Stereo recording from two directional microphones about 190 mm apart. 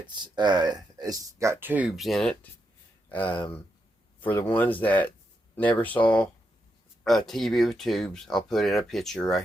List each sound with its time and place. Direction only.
0.1 s speech: 20° right (ahead or behind); by 6.2 s 5° left (ahead or behind)
7.3 s speech: centre (ahead or behind)